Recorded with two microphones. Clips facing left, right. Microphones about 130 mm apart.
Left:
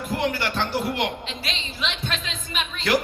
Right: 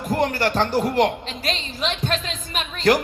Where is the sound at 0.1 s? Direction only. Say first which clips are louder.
Right 5 dB; 45° right (ahead or behind).